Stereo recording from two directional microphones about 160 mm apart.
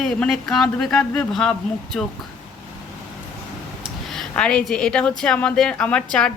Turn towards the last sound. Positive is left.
turn(degrees=5)  # may be behind; listen again after turning